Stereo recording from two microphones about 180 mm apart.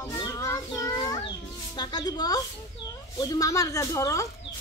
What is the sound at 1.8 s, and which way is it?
A woman's voice, 25° left (ahead or behind).